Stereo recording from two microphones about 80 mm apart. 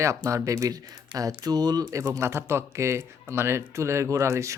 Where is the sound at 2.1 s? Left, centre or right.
Right.